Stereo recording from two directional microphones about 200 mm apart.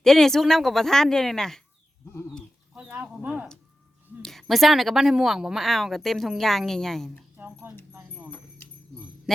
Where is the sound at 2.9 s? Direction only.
10° right (ahead or behind).